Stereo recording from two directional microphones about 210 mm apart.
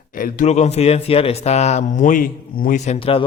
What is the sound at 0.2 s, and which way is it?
Speech, 35° left (ahead or behind).